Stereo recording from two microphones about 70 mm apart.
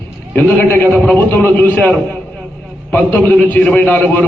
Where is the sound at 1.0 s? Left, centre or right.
Left.